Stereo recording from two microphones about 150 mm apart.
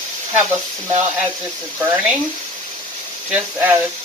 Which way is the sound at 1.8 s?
15° right (ahead or behind).